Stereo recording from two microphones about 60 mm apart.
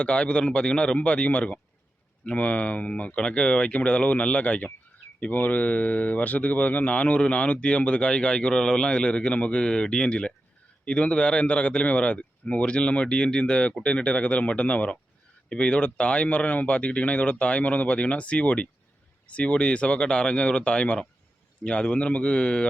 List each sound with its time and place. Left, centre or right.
0.0 s a man's voice: centre